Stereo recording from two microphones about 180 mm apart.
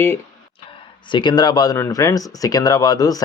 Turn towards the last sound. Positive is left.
turn(degrees=20)  # may be behind; listen again after turning